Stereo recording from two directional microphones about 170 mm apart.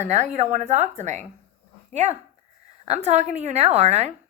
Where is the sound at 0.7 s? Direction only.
45° right (ahead or behind).